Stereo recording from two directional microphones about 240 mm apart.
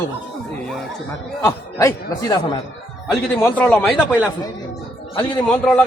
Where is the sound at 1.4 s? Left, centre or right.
Centre.